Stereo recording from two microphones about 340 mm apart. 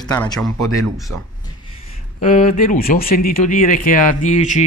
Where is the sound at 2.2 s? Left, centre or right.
Left.